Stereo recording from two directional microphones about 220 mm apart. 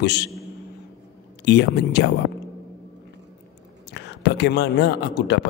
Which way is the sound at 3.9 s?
50° left (ahead or behind).